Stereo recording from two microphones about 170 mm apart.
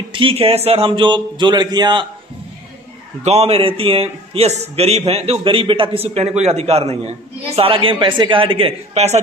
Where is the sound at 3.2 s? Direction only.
35° right (ahead or behind).